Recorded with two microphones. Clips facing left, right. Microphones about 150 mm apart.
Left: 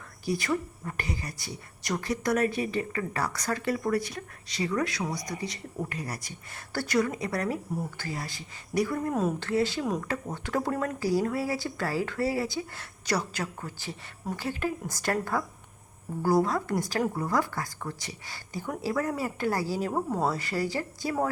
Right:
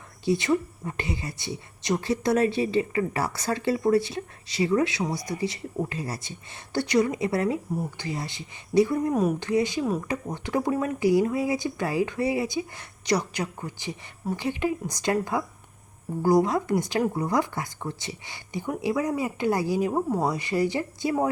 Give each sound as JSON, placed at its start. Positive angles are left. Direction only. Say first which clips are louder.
{"t": 0.3, "sound": "a woman's voice", "louder": "right 5 dB", "side_deg": -25}
{"t": 9.8, "sound": "a woman's voice", "louder": "right 3 dB", "side_deg": -5}